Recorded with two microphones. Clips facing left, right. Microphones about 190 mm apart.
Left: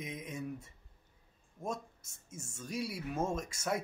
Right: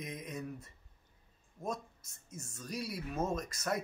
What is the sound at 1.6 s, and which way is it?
Speech, 25° left (ahead or behind).